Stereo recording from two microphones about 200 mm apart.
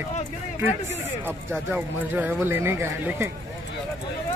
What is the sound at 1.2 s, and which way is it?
Speech, 10° right (ahead or behind).